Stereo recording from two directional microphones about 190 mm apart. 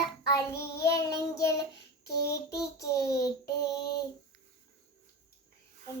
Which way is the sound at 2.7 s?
15° left (ahead or behind).